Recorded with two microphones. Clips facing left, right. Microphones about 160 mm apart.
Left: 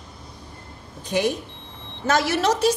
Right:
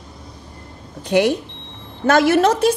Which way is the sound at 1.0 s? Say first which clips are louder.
Right 6 dB; 70° right (ahead or behind).